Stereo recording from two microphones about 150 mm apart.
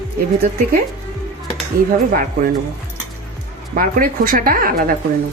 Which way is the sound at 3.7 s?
70° right (ahead or behind).